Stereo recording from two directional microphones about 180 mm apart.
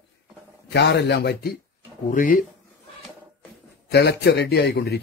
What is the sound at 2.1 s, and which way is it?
Speech, 45° left (ahead or behind).